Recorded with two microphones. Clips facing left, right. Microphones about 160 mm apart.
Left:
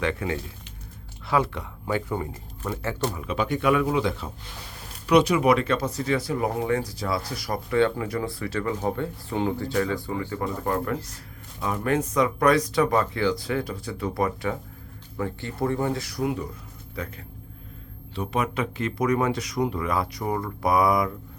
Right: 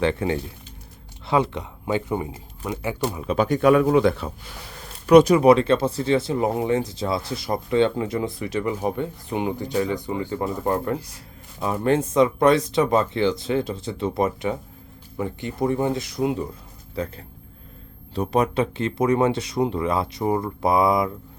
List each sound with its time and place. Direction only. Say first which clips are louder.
0.0 s speech: right 5 dB; 30° right (ahead or behind); by 3.2 s 10° right (ahead or behind)
3.2 s speech: right 6 dB; 40° right (ahead or behind); by 21.1 s 25° right (ahead or behind)